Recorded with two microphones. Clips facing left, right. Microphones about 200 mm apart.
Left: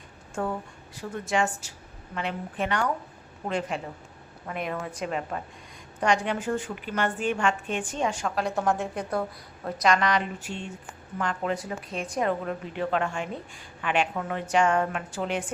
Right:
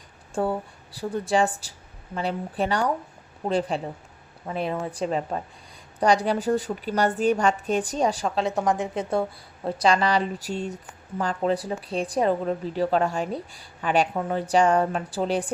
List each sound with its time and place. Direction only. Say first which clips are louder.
0.3 s a woman's voice: right 5 dB; 30° right (ahead or behind)
8.4 s a woman's voice: right 1 dB; 20° right (ahead or behind); by 15.5 s 35° right (ahead or behind)